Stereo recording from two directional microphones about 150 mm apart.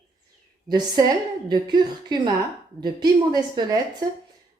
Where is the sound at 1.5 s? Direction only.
30° right (ahead or behind).